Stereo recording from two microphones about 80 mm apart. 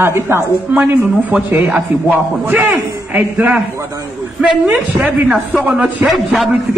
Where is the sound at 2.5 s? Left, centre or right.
Centre.